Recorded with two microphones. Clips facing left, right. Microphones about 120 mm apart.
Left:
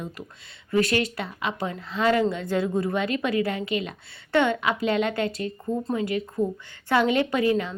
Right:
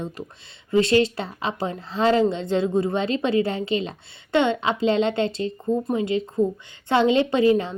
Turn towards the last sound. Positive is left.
turn(degrees=-25)  # may be behind; listen again after turning